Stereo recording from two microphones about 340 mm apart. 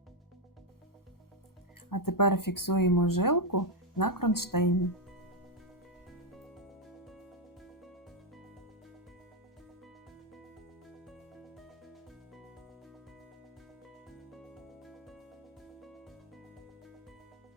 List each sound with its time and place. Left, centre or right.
1.9 s speech: left
11.0 s music: centre
14.5 s music: centre